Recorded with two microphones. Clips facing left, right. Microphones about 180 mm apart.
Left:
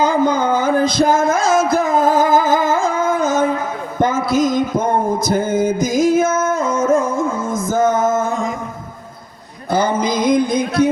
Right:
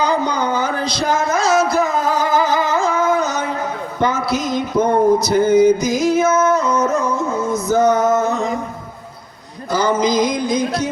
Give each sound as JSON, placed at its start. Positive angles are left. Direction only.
{"t": 0.0, "sound": "music", "side_deg": 50}
{"t": 3.9, "sound": "a sound", "side_deg": 50}
{"t": 9.6, "sound": "music", "side_deg": 55}